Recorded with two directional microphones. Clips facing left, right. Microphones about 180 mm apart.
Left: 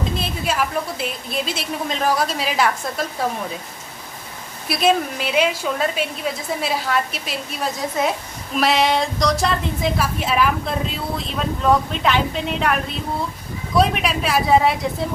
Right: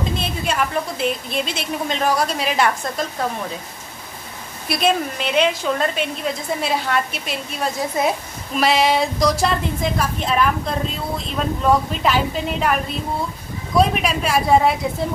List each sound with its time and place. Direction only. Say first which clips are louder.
0.0 s a woman's voice: right 1 dB; centre (ahead or behind)
4.6 s a woman's voice: left 1 dB; centre (ahead or behind)